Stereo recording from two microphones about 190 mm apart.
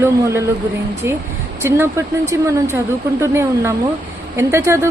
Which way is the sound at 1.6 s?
15° right (ahead or behind).